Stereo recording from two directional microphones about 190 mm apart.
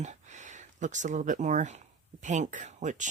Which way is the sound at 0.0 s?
40° right (ahead or behind).